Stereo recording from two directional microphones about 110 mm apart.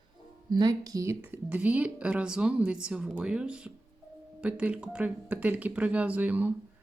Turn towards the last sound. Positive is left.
turn(degrees=-15)  # may be behind; listen again after turning